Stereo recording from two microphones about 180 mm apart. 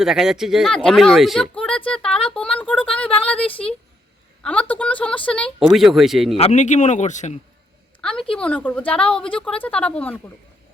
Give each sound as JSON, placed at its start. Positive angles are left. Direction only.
{"t": 0.0, "sound": "speech", "side_deg": 0}
{"t": 3.4, "sound": "speech", "side_deg": 30}
{"t": 4.4, "sound": "speech", "side_deg": 10}
{"t": 6.3, "sound": "speech", "side_deg": 40}
{"t": 8.3, "sound": "speech", "side_deg": 5}